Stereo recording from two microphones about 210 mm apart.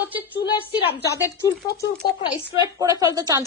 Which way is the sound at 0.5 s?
25° left (ahead or behind).